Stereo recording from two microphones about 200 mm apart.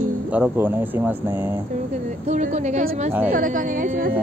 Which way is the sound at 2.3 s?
35° right (ahead or behind).